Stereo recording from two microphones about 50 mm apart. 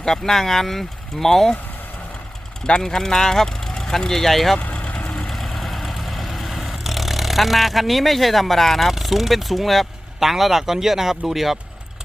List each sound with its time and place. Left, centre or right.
0.0 s speech: centre
2.6 s speech: centre
4.5 s vehicle: left
5.3 s vehicle: centre